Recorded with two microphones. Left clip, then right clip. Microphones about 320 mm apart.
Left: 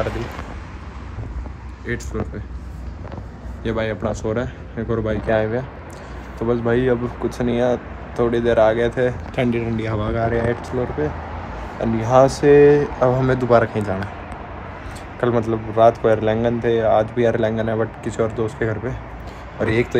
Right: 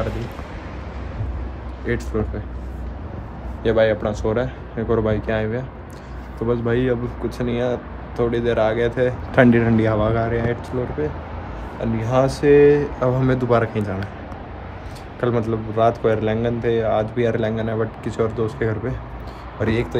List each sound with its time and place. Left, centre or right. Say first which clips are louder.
0.0 s speech: left 2 dB; centre
1.9 s speech: right 3 dB; centre
3.6 s speech: right 6 dB; centre
9.5 s speech: right 5 dB; right
9.9 s speech: right 1 dB; centre
15.1 s speech: left 2 dB; centre